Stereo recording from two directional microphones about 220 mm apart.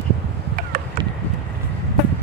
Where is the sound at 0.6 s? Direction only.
40° right (ahead or behind).